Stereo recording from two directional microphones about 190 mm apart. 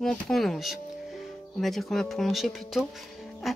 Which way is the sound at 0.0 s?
Centre (ahead or behind).